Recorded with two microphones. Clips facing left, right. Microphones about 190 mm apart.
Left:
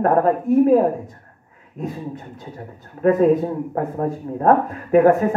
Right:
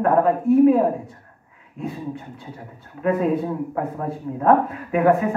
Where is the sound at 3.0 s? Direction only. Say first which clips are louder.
Left 5 dB; 40° left (ahead or behind).